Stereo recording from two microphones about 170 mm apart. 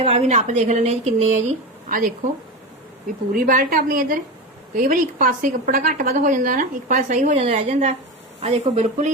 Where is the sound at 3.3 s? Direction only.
55° right (ahead or behind).